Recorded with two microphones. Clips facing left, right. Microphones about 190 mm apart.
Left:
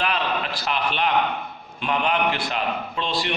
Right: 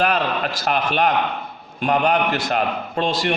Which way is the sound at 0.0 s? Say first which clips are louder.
Right 5 dB; 45° right (ahead or behind).